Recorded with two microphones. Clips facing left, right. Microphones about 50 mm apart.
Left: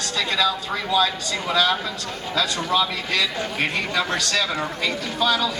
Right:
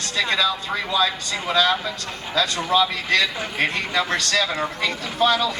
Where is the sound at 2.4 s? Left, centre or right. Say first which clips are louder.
Right 2 dB; right.